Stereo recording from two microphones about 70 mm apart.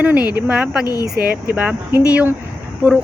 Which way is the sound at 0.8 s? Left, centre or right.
Left.